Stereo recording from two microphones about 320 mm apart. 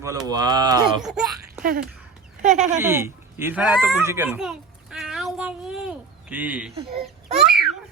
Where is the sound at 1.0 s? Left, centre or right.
Centre.